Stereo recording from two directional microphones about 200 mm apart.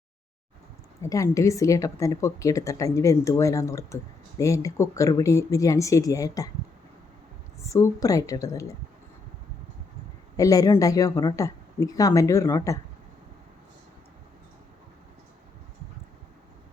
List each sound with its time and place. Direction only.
1.1 s a woman's voice: 15° left (ahead or behind)
7.6 s a woman's voice: 15° left (ahead or behind)
10.3 s a woman's voice: 15° left (ahead or behind)